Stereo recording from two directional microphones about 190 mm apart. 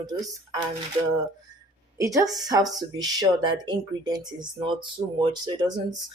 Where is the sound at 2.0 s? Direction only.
15° right (ahead or behind).